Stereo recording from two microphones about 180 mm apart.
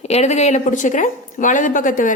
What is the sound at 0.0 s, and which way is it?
A woman's voice, 40° left (ahead or behind).